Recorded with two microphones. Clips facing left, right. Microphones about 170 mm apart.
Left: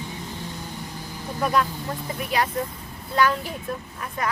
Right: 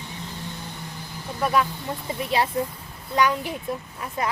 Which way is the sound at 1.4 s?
Centre (ahead or behind).